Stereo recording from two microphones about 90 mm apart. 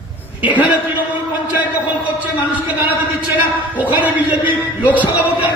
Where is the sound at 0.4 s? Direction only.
20° right (ahead or behind).